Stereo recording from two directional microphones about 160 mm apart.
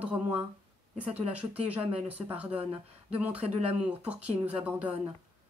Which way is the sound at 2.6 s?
40° right (ahead or behind).